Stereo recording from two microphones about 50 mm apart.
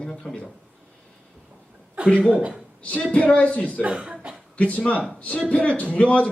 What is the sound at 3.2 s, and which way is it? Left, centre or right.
Speech, left.